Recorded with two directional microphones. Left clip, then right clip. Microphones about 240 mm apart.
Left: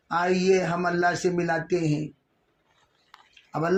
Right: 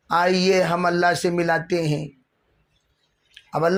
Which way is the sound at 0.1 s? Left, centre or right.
Right.